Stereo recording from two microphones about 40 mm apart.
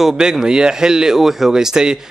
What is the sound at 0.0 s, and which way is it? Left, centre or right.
A man's voice, centre.